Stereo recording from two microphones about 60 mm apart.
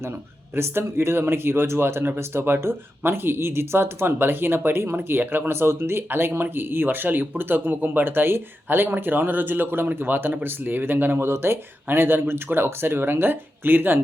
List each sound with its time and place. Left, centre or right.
0.5 s speech: right